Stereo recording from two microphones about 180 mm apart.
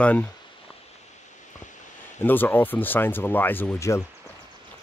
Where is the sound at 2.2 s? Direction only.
10° left (ahead or behind).